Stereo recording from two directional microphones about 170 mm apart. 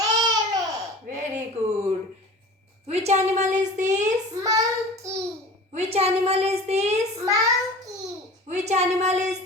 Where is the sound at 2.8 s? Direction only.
40° right (ahead or behind).